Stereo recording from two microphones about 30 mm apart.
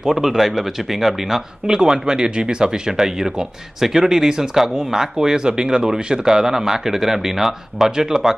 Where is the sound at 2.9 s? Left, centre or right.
Centre.